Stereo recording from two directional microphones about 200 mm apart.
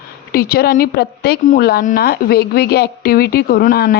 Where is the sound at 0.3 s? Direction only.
50° left (ahead or behind).